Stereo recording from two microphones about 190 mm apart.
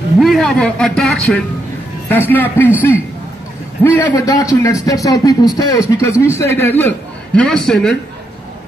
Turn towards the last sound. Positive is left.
turn(degrees=5)  # may be behind; listen again after turning